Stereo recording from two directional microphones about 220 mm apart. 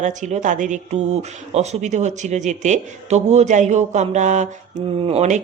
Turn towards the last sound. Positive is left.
turn(degrees=-30)  # may be behind; listen again after turning